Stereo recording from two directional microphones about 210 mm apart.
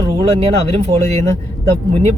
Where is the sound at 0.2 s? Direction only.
30° right (ahead or behind).